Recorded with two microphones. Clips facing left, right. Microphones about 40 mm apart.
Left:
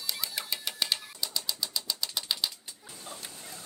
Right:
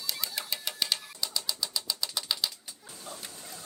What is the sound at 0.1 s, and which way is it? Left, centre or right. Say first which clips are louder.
Bird: even; centre.